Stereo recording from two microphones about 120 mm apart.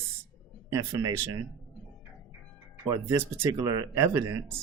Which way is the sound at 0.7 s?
30° right (ahead or behind).